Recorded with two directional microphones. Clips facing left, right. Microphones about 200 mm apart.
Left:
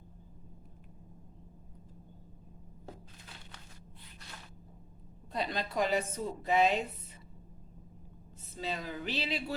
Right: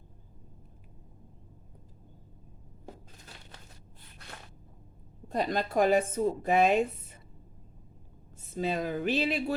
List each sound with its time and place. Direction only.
5.3 s a woman's voice: 45° right (ahead or behind)
8.5 s a woman's voice: 50° right (ahead or behind)